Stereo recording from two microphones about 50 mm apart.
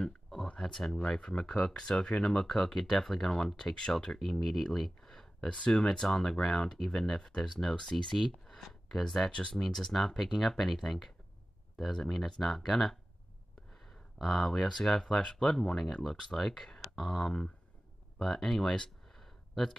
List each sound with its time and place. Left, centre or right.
0.0 s a sound: centre
0.6 s speech: centre
9.0 s speech: centre
9.6 s speech: centre
14.4 s speech: centre
17.2 s speech: centre
18.2 s speech: centre